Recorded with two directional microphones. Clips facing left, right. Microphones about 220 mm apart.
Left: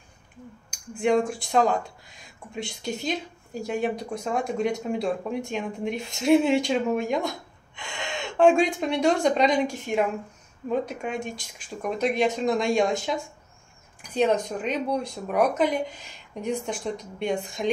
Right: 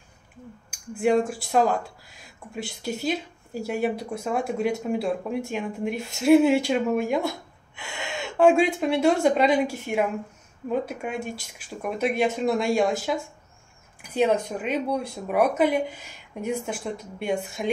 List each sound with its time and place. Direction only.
0.7 s speech: 5° right (ahead or behind)